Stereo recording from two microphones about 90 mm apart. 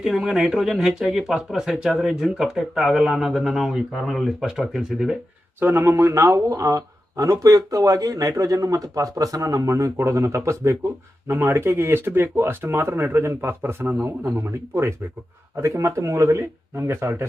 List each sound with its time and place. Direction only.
0.0 s speech: 5° right (ahead or behind)
5.5 s speech: 25° right (ahead or behind)